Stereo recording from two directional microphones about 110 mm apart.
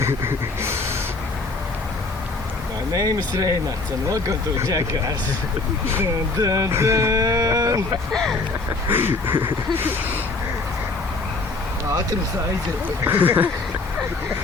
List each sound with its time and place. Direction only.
0.0 s speech: 25° right (ahead or behind)
2.9 s speech: 35° right (ahead or behind)
8.1 s speech: 5° left (ahead or behind)
8.9 s a sound: 20° right (ahead or behind)
13.1 s speech: 15° right (ahead or behind)